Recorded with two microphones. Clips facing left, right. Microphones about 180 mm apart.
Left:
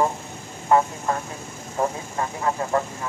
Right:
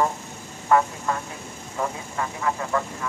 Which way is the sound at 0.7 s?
25° left (ahead or behind).